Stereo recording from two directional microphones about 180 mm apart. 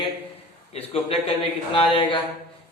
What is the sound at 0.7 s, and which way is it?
A man's voice, 35° left (ahead or behind).